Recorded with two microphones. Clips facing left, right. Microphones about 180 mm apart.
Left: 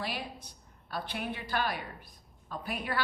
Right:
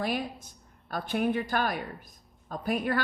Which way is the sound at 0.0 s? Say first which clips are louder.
Right 7 dB; 50° right (ahead or behind).